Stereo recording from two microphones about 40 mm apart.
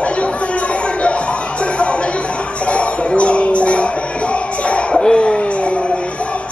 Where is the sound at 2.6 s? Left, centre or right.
Left.